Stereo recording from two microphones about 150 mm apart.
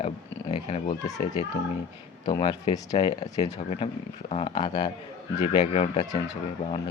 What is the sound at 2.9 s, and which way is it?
Speech, 45° left (ahead or behind).